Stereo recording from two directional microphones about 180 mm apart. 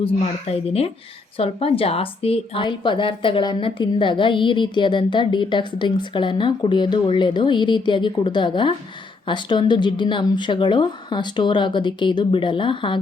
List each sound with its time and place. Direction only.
0.0 s a woman's voice: 35° left (ahead or behind)